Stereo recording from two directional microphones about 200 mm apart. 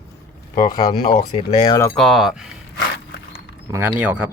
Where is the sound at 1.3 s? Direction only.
25° left (ahead or behind).